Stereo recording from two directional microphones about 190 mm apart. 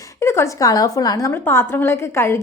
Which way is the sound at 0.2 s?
15° left (ahead or behind).